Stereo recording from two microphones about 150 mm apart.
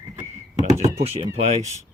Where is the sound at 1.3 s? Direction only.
45° right (ahead or behind).